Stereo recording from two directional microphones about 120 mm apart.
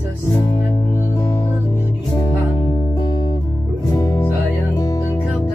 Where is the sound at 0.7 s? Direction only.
30° left (ahead or behind).